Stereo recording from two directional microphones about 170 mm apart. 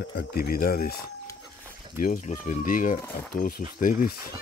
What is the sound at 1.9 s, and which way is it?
Speech, 55° left (ahead or behind).